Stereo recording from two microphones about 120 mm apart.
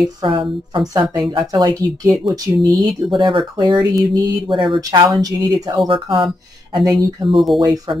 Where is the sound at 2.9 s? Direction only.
Centre (ahead or behind).